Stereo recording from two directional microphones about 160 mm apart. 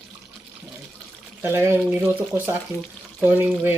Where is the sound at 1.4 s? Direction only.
15° right (ahead or behind).